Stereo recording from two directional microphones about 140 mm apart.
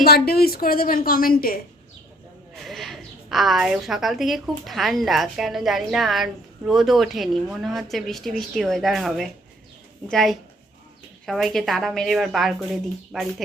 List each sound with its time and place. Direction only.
0.0 s a woman's voice: 90° left
2.6 s a woman's voice: centre (ahead or behind)